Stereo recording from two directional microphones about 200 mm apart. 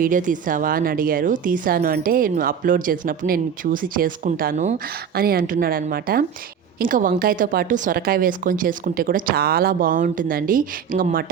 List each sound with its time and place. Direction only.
0.0 s speech: 40° right (ahead or behind)
5.1 s speech: 50° right (ahead or behind)